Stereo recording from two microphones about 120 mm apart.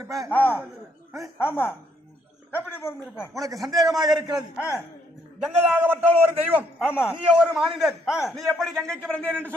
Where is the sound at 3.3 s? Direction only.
30° right (ahead or behind).